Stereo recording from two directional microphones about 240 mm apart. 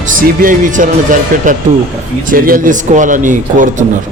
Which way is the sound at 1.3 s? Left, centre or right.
Right.